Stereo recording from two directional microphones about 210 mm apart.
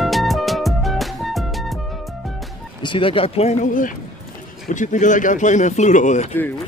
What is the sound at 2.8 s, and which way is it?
Speech, 25° left (ahead or behind).